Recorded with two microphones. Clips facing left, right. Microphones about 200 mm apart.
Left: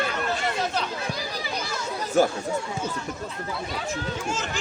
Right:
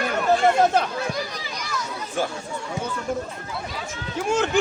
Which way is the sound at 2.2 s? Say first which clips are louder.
Left 6 dB; 40° left (ahead or behind).